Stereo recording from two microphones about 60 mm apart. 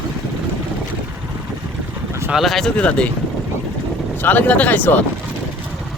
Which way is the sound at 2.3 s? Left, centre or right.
Centre.